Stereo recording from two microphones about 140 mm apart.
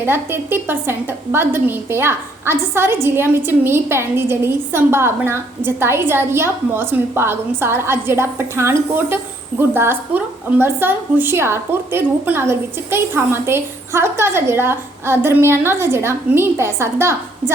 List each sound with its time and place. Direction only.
0.0 s a woman's voice: 15° right (ahead or behind)